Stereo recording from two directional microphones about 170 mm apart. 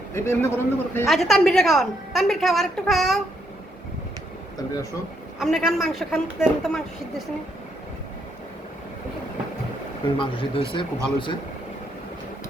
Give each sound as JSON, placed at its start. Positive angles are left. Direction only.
{"t": 0.1, "sound": "a man's voice", "side_deg": 15}
{"t": 1.0, "sound": "a woman's voice", "side_deg": 0}
{"t": 5.4, "sound": "a woman's voice", "side_deg": 0}
{"t": 10.2, "sound": "speech", "side_deg": 30}